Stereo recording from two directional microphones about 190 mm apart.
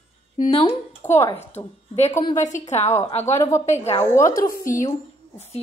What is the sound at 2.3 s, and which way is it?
Speech, 40° left (ahead or behind).